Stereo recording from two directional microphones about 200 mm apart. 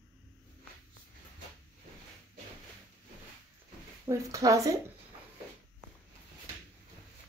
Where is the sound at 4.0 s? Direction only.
15° right (ahead or behind).